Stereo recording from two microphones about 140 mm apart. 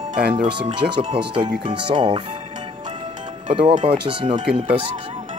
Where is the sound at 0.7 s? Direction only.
35° right (ahead or behind).